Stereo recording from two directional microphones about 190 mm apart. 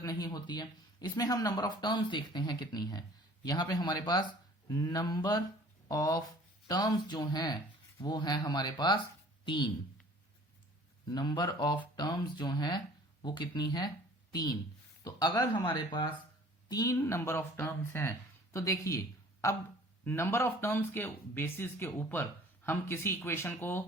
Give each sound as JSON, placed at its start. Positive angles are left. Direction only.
{"t": 0.0, "sound": "speech", "side_deg": 20}
{"t": 11.1, "sound": "speech", "side_deg": 20}
{"t": 15.0, "sound": "speech", "side_deg": 20}